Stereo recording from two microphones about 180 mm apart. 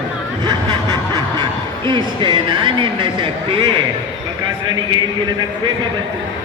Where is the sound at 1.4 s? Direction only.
25° right (ahead or behind).